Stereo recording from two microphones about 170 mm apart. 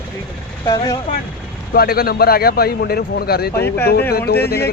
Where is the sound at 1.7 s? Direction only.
65° left (ahead or behind).